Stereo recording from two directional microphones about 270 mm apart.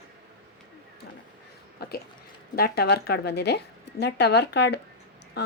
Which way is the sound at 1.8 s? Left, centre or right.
Left.